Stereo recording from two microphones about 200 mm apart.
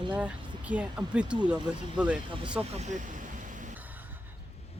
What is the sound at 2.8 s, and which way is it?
Vehicle, 40° right (ahead or behind).